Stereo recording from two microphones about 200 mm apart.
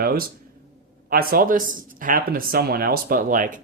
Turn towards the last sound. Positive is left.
turn(degrees=-40)  # may be behind; listen again after turning